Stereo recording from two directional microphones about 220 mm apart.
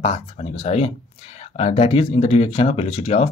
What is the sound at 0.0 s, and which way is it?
Speech, 30° left (ahead or behind).